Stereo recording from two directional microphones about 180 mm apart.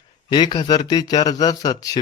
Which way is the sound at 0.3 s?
25° left (ahead or behind).